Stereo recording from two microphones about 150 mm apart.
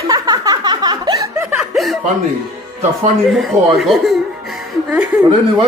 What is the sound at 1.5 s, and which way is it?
Chuckle, 5° right (ahead or behind).